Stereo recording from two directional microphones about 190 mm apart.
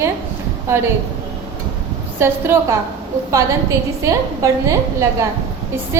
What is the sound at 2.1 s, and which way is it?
Speech, 15° right (ahead or behind).